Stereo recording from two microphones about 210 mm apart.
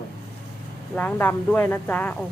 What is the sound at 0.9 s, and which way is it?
Speech, 10° left (ahead or behind).